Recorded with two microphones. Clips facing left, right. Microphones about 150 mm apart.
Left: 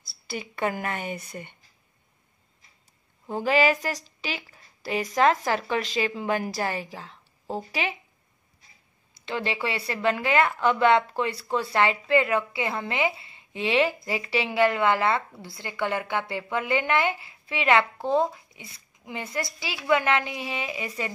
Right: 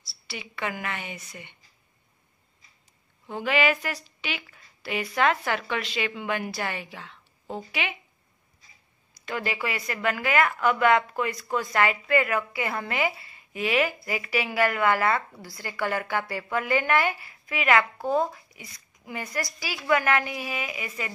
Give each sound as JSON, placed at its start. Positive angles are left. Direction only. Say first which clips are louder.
{"t": 0.3, "sound": "a woman's voice", "louder": "left 5 dB", "side_deg": 45}
{"t": 3.3, "sound": "a woman's voice", "louder": "left 3 dB", "side_deg": 40}
{"t": 9.1, "sound": "a woman's voice", "louder": "left 1 dB", "side_deg": 25}